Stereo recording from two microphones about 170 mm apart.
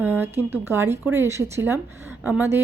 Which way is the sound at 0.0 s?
10° right (ahead or behind).